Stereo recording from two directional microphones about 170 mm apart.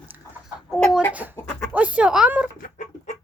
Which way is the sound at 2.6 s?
45° left (ahead or behind).